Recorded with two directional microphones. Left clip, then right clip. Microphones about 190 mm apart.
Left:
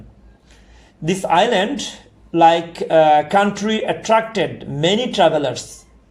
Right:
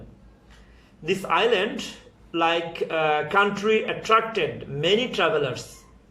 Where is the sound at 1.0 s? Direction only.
40° left (ahead or behind).